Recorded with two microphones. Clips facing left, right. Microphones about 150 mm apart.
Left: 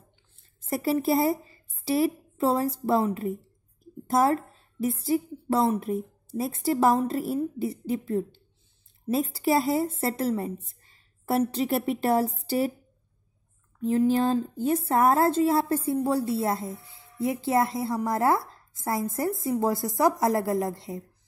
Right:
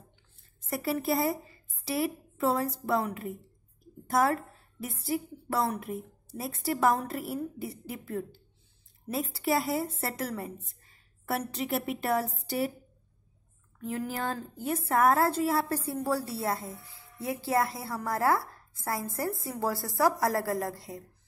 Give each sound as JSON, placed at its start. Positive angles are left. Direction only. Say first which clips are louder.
{"t": 0.6, "sound": "a woman's voice", "louder": "left 5 dB", "side_deg": 30}
{"t": 13.7, "sound": "speech", "louder": "left 11 dB", "side_deg": 25}